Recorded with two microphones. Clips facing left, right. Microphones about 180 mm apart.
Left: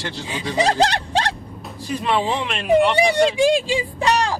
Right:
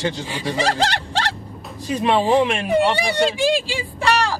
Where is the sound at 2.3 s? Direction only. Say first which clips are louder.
Right 7 dB; 15° right (ahead or behind).